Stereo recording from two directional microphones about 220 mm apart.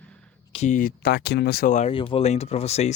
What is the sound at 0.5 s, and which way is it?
Speech, 35° left (ahead or behind).